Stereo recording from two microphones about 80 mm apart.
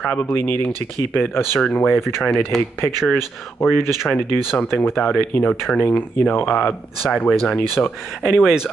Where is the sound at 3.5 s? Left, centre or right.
Left.